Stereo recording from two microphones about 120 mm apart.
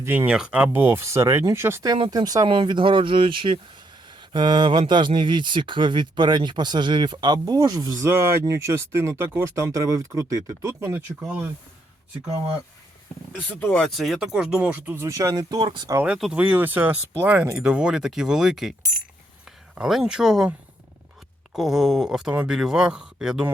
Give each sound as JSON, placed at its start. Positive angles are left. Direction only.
{"t": 0.0, "sound": "speech", "side_deg": -20}
{"t": 0.3, "sound": "speech", "side_deg": -10}
{"t": 2.0, "sound": "speech", "side_deg": -35}
{"t": 13.3, "sound": "speech", "side_deg": 10}
{"t": 15.6, "sound": "speech", "side_deg": -45}
{"t": 16.0, "sound": "speech", "side_deg": -5}
{"t": 19.7, "sound": "speech", "side_deg": -5}
{"t": 21.5, "sound": "speech", "side_deg": -5}